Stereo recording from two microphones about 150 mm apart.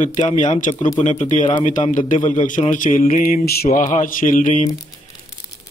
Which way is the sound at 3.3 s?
80° left.